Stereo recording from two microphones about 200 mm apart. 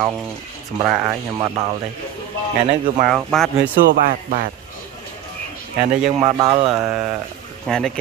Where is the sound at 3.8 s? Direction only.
45° right (ahead or behind).